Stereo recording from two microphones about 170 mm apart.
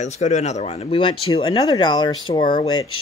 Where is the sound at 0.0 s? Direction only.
45° left (ahead or behind); by 2.1 s 25° left (ahead or behind).